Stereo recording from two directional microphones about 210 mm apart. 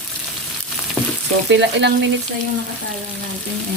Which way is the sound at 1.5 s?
55° right (ahead or behind).